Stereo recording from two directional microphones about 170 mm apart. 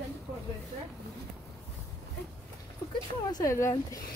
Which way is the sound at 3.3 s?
20° left (ahead or behind).